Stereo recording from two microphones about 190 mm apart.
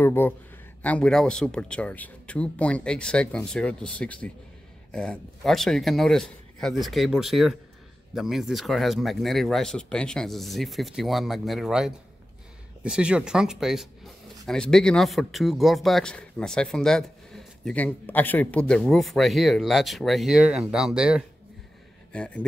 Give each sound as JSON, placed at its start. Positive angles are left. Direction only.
{"t": 0.0, "sound": "speech", "side_deg": 10}